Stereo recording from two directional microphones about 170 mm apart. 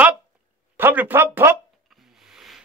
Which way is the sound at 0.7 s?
10° right (ahead or behind).